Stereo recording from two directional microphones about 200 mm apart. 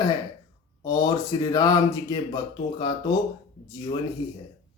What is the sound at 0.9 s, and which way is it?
Speech, 20° left (ahead or behind).